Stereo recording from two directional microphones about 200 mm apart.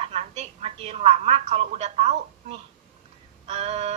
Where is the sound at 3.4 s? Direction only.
30° right (ahead or behind).